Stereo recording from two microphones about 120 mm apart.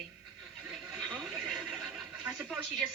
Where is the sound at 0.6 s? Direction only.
Centre (ahead or behind).